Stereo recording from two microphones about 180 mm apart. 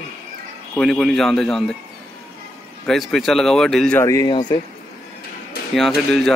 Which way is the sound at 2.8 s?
Centre (ahead or behind).